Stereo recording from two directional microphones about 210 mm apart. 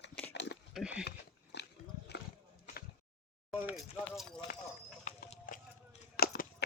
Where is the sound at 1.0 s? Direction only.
55° left (ahead or behind).